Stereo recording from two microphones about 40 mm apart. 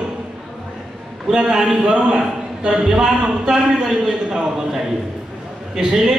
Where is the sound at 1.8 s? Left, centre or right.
Right.